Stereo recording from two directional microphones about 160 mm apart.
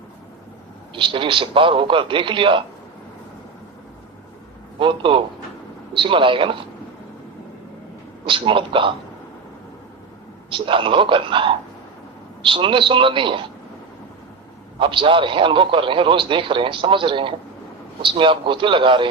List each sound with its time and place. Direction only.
0.9 s a man's voice: 30° right (ahead or behind)
4.8 s a man's voice: 30° right (ahead or behind)
8.3 s a man's voice: 30° right (ahead or behind)
10.5 s a man's voice: 30° right (ahead or behind)
14.8 s a man's voice: 30° right (ahead or behind)